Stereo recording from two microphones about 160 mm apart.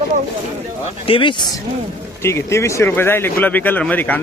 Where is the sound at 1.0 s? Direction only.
35° left (ahead or behind).